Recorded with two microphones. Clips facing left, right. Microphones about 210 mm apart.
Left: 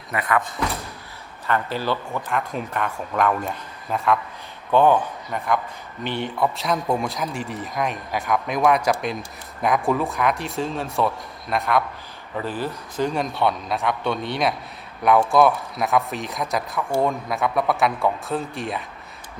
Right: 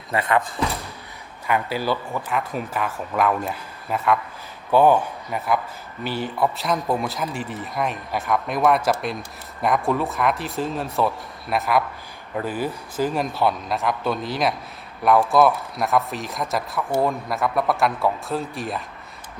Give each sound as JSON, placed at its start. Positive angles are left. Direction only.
{"t": 0.1, "sound": "speech", "side_deg": -25}
{"t": 1.5, "sound": "speech", "side_deg": -10}